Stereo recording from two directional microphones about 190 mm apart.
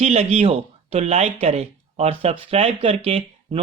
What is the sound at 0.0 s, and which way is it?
Speech, 35° right (ahead or behind).